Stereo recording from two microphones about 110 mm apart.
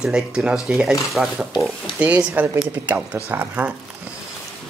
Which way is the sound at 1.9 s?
15° right (ahead or behind).